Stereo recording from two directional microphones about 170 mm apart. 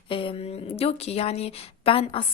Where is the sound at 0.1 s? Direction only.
30° left (ahead or behind).